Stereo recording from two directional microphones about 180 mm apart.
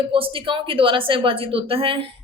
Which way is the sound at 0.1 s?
30° right (ahead or behind).